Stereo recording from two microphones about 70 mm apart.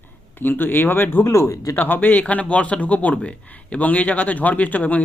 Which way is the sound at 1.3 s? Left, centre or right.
Left.